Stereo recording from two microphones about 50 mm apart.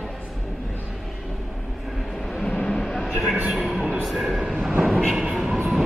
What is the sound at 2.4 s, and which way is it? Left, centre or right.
Vehicle, centre.